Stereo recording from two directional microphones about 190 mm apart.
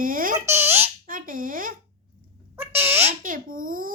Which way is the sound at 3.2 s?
45° right (ahead or behind).